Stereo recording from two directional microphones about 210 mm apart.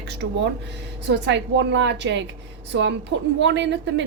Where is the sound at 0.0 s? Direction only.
55° right (ahead or behind).